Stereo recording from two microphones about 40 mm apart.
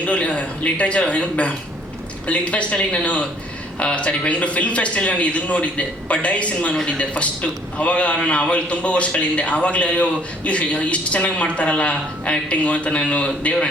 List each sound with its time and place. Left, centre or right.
0.0 s a man's voice: left